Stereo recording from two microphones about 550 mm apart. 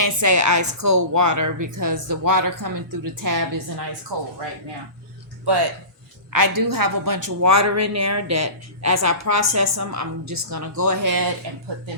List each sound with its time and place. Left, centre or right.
0.0 s a woman's voice: right
5.5 s speech: right
6.3 s a woman's voice: right